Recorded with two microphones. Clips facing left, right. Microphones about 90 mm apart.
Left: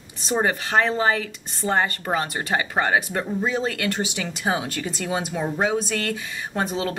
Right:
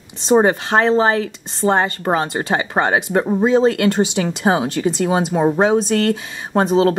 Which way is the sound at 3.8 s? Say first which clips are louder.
Right 9 dB; 35° right (ahead or behind).